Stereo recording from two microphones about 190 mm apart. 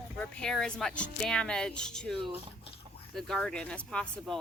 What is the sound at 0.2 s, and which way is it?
A woman's voice, 5° left (ahead or behind).